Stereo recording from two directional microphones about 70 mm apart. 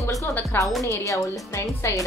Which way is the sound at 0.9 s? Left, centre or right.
Left.